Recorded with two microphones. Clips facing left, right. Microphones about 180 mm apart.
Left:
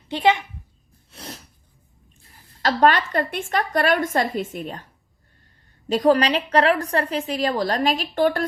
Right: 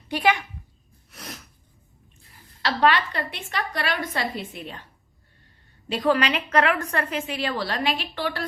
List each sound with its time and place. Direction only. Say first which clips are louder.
0.1 s speech: left 3 dB; 25° left (ahead or behind)
1.1 s sneeze: left 2 dB; 30° left (ahead or behind)
2.6 s a woman's voice: left 3 dB; 45° left (ahead or behind)
5.9 s a woman's voice: left 5 dB; 40° left (ahead or behind)